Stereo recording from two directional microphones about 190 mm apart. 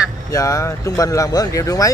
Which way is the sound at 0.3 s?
15° left (ahead or behind).